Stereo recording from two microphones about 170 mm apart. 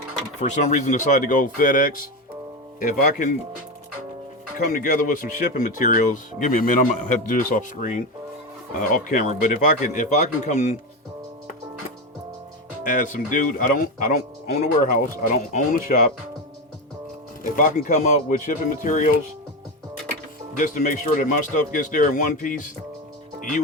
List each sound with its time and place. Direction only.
0.3 s speech: 45° left (ahead or behind)
4.5 s speech: 55° left (ahead or behind)
12.8 s speech: 55° left (ahead or behind)
17.4 s speech: 55° left (ahead or behind)
20.6 s speech: 50° left (ahead or behind)